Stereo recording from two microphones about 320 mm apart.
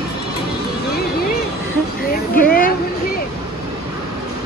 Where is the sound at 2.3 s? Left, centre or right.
Left.